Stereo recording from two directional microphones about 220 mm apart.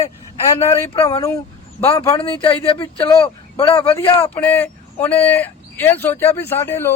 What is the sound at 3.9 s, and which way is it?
Speech, 10° left (ahead or behind).